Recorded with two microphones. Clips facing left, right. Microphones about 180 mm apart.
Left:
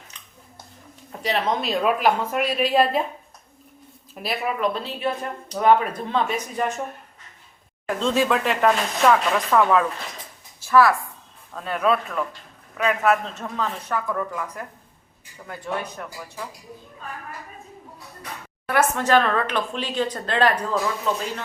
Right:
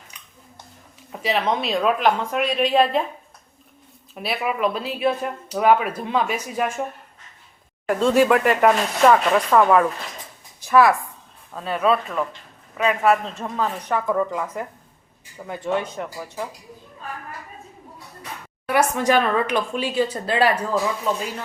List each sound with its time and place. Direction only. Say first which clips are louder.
1.2 s a woman's voice: right 1 dB; centre (ahead or behind)
4.1 s speech: right 1 dB; centre (ahead or behind)
7.9 s a woman's voice: right 5 dB; 10° right (ahead or behind)
11.5 s a woman's voice: right 2 dB; 5° right (ahead or behind); by 16.0 s 20° right (ahead or behind)
18.7 s speech: right 1 dB; 15° right (ahead or behind)